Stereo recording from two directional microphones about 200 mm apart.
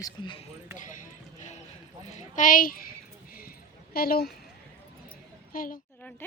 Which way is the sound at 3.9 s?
50° left (ahead or behind).